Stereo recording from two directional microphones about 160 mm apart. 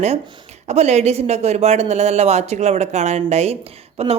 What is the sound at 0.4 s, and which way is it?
Speech, 45° right (ahead or behind).